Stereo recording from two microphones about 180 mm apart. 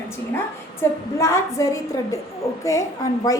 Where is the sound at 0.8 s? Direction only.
15° left (ahead or behind).